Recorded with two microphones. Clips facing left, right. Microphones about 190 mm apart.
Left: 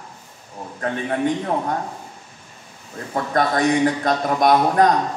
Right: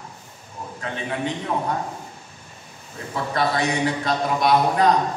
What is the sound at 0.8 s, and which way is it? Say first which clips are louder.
Speech: left 6 dB; 50° left (ahead or behind).